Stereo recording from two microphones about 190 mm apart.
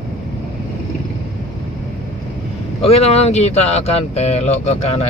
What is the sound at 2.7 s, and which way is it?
Speech, 35° left (ahead or behind).